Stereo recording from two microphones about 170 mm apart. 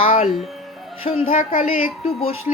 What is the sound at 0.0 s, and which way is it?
Music, 50° left (ahead or behind).